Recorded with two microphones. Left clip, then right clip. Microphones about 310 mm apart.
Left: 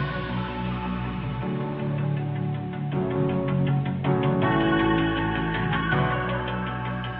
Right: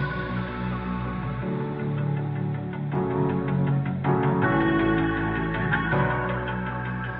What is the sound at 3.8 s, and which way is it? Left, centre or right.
Music, centre.